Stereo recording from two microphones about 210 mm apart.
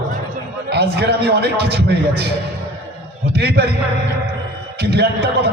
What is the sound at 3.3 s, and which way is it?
Speech, 50° right (ahead or behind).